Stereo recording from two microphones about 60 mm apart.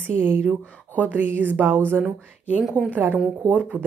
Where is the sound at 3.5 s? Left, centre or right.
Centre.